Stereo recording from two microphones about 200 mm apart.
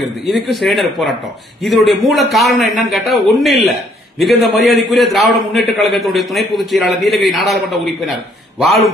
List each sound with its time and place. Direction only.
0.0 s a man's voice: centre (ahead or behind)